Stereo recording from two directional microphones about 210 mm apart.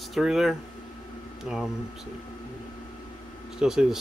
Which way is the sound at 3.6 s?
Centre (ahead or behind).